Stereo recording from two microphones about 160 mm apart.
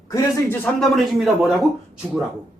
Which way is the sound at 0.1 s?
20° left (ahead or behind).